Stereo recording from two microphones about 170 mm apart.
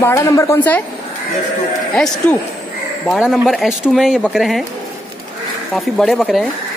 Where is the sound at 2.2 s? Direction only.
10° left (ahead or behind).